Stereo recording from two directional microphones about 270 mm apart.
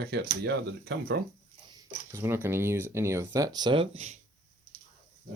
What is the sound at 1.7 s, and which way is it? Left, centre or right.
Speech, centre.